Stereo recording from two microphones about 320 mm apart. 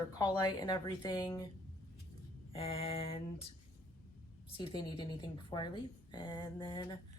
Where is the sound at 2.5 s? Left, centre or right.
Centre.